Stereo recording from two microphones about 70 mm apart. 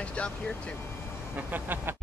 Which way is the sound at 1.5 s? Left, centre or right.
Right.